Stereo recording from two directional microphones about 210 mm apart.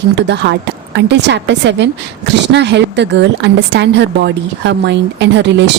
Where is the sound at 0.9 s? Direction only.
55° right (ahead or behind).